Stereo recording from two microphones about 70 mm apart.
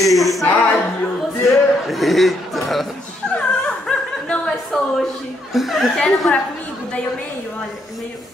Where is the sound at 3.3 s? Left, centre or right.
Centre.